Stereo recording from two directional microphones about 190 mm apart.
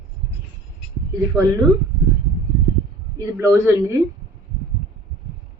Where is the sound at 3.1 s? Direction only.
15° right (ahead or behind).